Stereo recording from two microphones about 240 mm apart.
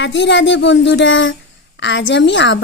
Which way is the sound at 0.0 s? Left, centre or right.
Left.